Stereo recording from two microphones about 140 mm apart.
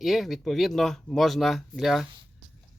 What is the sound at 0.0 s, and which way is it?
Speech, centre (ahead or behind).